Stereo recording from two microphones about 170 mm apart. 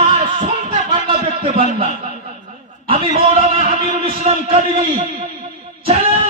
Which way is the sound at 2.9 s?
35° right (ahead or behind).